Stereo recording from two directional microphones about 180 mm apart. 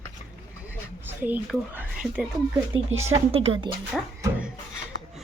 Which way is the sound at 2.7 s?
35° right (ahead or behind).